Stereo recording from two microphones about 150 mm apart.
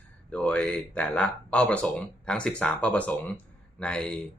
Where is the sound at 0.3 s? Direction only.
5° left (ahead or behind).